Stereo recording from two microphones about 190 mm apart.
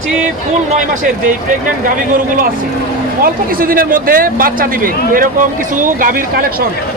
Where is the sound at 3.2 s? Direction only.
50° right (ahead or behind).